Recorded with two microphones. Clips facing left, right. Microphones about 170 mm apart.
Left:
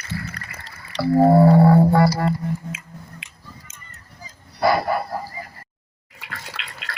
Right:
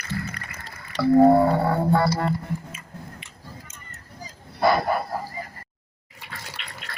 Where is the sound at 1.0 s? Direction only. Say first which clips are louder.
Right 1 dB; 30° left (ahead or behind).